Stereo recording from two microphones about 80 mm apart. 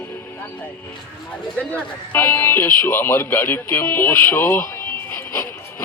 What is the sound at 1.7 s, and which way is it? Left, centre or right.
A man's voice, left.